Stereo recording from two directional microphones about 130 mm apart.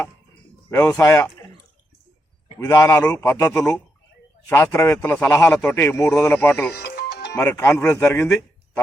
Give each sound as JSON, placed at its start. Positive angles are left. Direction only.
{"t": 0.7, "sound": "speech", "side_deg": 25}
{"t": 2.6, "sound": "speech", "side_deg": 25}